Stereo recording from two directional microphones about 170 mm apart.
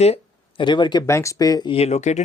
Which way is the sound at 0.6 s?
25° left (ahead or behind).